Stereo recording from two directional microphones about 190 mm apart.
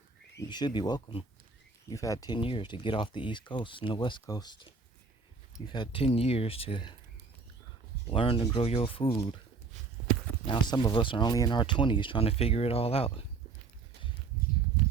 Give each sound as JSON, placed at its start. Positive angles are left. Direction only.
{"t": 0.3, "sound": "speech", "side_deg": 20}
{"t": 8.1, "sound": "speech", "side_deg": 30}
{"t": 10.4, "sound": "speech", "side_deg": 25}